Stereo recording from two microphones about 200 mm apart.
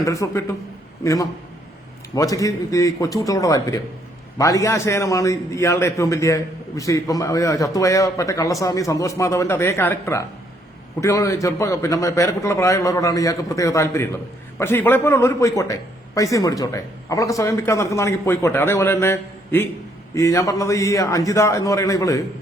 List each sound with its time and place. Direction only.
0.0 s a man's voice: 15° left (ahead or behind)